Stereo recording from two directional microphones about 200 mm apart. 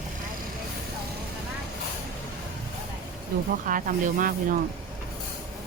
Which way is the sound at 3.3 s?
45° right (ahead or behind).